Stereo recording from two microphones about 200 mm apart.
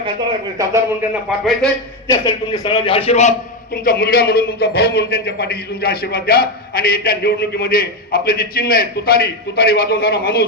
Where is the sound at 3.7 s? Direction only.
45° left (ahead or behind).